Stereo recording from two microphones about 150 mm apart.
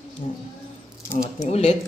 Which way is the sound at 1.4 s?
45° left (ahead or behind).